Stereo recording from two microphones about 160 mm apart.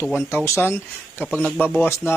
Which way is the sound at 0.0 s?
15° left (ahead or behind).